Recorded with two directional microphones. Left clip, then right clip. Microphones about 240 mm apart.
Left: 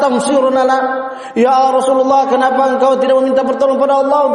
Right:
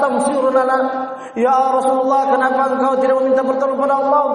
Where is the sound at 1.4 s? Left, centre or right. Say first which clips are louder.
Left 4 dB; left.